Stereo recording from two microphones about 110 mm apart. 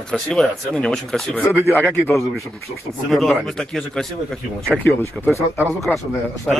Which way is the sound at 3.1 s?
Centre (ahead or behind).